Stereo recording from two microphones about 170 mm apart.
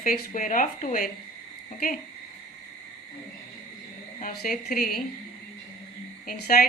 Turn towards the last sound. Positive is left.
turn(degrees=65)  # may be behind; listen again after turning